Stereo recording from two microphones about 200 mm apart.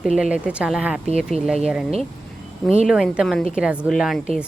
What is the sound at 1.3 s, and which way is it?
Speech, 30° right (ahead or behind).